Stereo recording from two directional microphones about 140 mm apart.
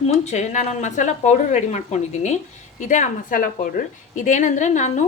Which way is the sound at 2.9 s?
70° left (ahead or behind).